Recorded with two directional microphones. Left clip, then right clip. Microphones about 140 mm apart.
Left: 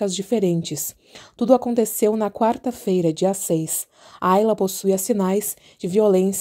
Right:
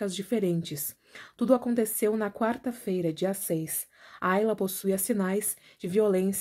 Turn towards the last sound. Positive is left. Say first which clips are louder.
# left 8 dB
turn(degrees=35)  # may be behind; listen again after turning